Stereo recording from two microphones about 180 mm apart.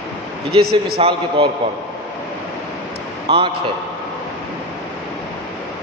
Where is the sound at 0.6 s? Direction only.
60° right (ahead or behind).